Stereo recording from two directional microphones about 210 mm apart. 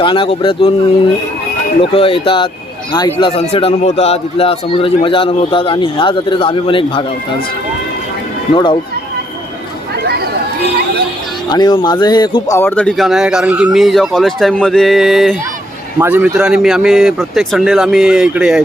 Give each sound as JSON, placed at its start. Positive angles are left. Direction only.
{"t": 0.0, "sound": "a man's voice", "side_deg": 25}
{"t": 8.5, "sound": "a man's voice", "side_deg": 20}
{"t": 9.9, "sound": "chatter", "side_deg": -50}
{"t": 11.4, "sound": "speech", "side_deg": 20}